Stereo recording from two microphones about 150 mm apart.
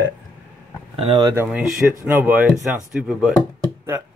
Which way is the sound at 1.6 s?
5° right (ahead or behind).